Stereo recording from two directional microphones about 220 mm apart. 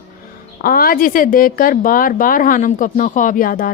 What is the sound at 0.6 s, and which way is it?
A woman's voice, 40° left (ahead or behind).